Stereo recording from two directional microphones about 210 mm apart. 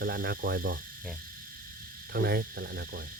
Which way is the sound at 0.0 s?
45° right (ahead or behind).